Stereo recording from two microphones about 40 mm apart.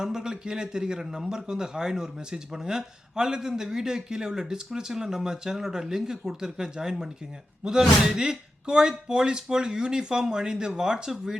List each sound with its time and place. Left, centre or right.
0.0 s speech: centre